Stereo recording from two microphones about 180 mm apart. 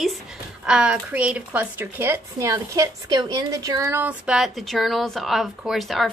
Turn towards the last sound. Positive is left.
turn(degrees=0)  # may be behind; listen again after turning